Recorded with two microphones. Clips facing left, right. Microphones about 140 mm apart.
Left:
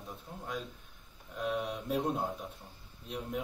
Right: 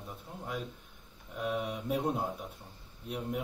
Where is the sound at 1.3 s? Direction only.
5° right (ahead or behind).